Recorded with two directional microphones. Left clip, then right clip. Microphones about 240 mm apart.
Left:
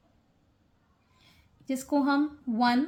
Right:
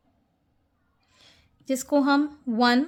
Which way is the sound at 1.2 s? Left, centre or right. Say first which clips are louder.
Right 5 dB; right.